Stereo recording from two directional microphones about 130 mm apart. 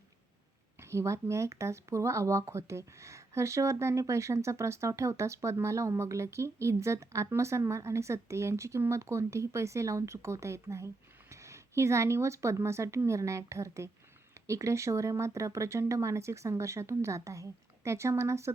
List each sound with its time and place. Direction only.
0.8 s speech: 20° right (ahead or behind)